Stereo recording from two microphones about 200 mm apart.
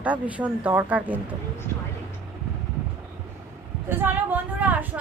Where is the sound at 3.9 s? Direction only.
10° right (ahead or behind).